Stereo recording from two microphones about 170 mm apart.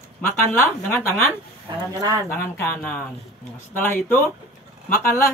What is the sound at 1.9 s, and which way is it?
Speech, 20° right (ahead or behind).